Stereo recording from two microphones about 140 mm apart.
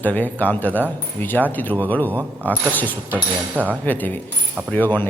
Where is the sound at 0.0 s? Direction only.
10° left (ahead or behind).